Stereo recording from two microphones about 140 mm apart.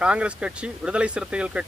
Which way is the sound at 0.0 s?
10° right (ahead or behind).